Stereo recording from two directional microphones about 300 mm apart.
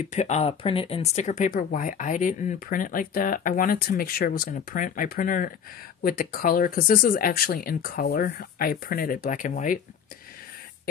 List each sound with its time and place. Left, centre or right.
0.1 s speech: left